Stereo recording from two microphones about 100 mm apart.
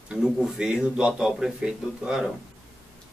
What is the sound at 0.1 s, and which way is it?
Speech, 5° right (ahead or behind).